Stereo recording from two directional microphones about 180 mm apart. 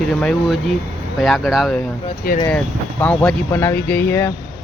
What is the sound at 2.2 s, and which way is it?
Speech, 55° left (ahead or behind).